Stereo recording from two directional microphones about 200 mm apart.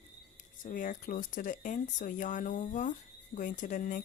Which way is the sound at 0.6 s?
40° left (ahead or behind).